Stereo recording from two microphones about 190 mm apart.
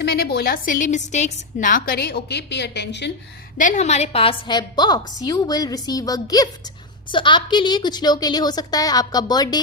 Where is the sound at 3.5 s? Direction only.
40° left (ahead or behind).